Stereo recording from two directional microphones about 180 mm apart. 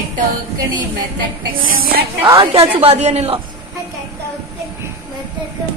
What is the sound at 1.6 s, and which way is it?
Speech, 50° right (ahead or behind).